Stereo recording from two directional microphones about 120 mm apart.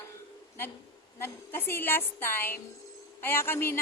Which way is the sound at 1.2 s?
20° left (ahead or behind).